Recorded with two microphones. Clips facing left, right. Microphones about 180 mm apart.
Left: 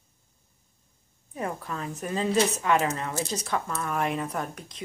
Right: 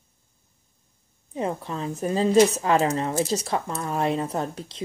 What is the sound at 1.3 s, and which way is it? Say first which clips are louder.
A woman's voice: right 4 dB; 25° right (ahead or behind).